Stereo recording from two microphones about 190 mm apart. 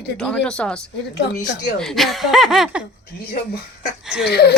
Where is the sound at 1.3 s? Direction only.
40° left (ahead or behind).